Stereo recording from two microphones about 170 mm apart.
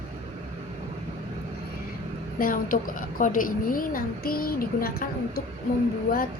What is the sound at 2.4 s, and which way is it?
A woman's voice, 55° left (ahead or behind).